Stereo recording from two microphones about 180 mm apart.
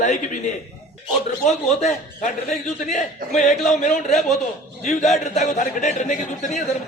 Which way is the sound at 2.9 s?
45° left (ahead or behind).